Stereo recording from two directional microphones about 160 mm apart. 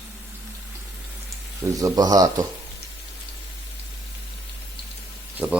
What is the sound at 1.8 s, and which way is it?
Speech, 20° right (ahead or behind).